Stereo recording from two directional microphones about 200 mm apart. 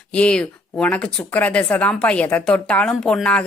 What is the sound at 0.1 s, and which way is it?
Speech, 5° left (ahead or behind).